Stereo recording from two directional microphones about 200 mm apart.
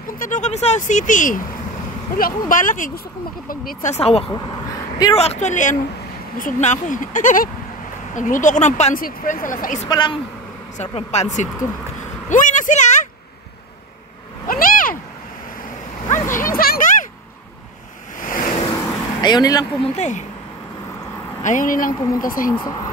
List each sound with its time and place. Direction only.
0.2 s speech: 40° left (ahead or behind)
9.8 s a woman's voice: 20° left (ahead or behind)
10.8 s speech: 35° left (ahead or behind)
14.5 s a sound: 45° left (ahead or behind)
16.1 s a sound: 40° left (ahead or behind)
18.2 s waves: 45° left (ahead or behind)
18.6 s vehicle: 20° left (ahead or behind)
20.0 s speech: 35° left (ahead or behind)
21.4 s speech: 40° left (ahead or behind)
22.5 s speech: 15° left (ahead or behind)